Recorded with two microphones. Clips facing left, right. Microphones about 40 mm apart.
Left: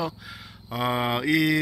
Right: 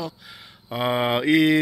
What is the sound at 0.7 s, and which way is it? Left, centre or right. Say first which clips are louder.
Speech: right 3 dB; centre.